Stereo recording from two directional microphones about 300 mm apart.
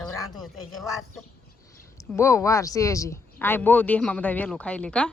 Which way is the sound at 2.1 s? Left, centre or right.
Centre.